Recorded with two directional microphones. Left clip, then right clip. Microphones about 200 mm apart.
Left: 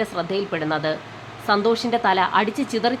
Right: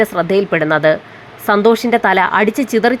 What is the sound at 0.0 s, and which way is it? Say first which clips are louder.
A woman's voice: right 10 dB; 25° right (ahead or behind).